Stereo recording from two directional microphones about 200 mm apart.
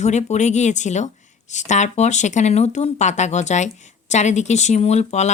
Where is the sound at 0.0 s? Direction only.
35° left (ahead or behind).